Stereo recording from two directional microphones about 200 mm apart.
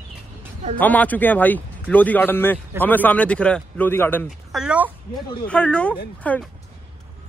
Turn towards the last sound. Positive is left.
turn(degrees=5)  # may be behind; listen again after turning